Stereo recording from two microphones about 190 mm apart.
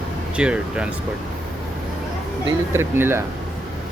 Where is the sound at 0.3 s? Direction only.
5° right (ahead or behind).